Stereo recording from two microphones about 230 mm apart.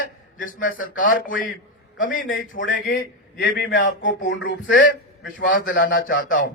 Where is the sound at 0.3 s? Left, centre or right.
Left.